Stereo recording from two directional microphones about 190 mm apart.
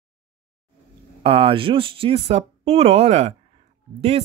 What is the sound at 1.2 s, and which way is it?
Speech, 30° right (ahead or behind).